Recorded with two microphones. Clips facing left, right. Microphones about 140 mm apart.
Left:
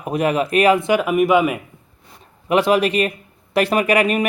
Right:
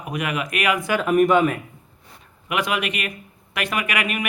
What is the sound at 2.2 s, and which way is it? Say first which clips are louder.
Speech: left 8 dB; 30° left (ahead or behind).